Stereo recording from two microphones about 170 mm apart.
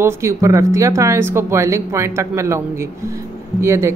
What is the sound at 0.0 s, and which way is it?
Speech, 15° right (ahead or behind).